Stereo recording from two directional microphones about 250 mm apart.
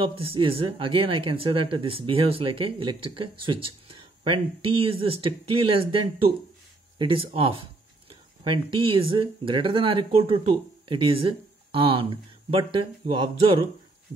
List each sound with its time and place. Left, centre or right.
0.0 s speech: right